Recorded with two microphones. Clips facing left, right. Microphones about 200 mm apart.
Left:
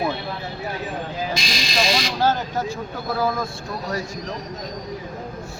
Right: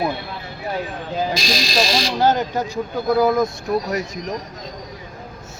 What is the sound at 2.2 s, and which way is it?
Speech, 20° right (ahead or behind).